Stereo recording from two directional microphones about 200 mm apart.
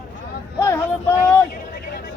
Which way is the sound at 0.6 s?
10° left (ahead or behind).